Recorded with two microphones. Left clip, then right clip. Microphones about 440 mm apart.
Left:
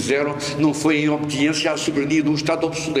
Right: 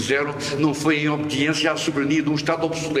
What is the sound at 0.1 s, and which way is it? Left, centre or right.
A man's voice, centre.